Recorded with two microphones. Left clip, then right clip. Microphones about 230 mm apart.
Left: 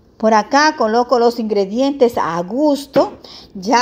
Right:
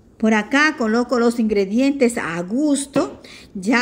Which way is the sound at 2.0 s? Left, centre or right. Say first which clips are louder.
Left 5 dB; left.